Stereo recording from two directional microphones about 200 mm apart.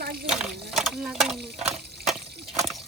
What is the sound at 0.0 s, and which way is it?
Water, 50° right (ahead or behind).